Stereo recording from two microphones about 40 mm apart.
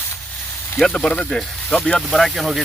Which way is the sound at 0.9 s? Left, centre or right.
Left.